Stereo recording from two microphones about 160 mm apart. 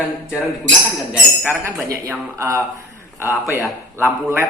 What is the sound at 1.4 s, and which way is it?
Speech, 15° right (ahead or behind).